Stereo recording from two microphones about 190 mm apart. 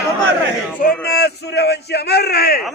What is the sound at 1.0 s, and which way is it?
Speech, 55° left (ahead or behind).